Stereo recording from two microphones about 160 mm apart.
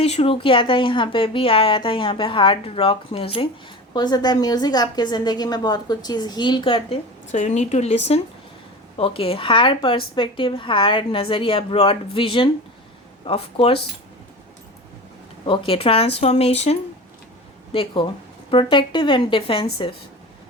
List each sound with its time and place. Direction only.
0.0 s speech: 40° left (ahead or behind)
3.9 s a woman's voice: 25° left (ahead or behind)
7.3 s speech: 50° left (ahead or behind)
15.4 s speech: 35° left (ahead or behind)
17.7 s speech: 30° left (ahead or behind)